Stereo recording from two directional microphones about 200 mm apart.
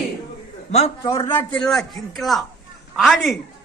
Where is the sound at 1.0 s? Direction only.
15° left (ahead or behind).